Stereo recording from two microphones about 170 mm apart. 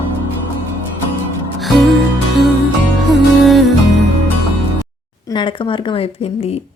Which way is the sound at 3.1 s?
Centre (ahead or behind).